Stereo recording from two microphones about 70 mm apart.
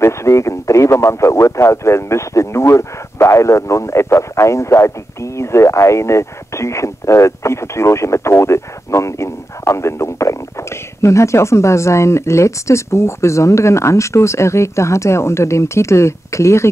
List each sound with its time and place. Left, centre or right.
0.0 s speech: left